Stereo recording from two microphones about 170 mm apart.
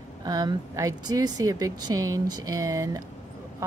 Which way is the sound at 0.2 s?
25° right (ahead or behind).